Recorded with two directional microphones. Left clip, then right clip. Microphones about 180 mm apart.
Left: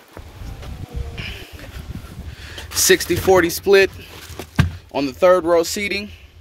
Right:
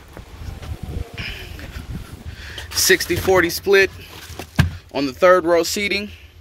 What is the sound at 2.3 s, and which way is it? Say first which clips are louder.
Speech: even; 25° left (ahead or behind).